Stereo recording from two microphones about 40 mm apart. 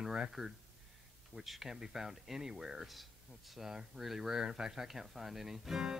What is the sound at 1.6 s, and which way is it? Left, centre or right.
Speech, centre.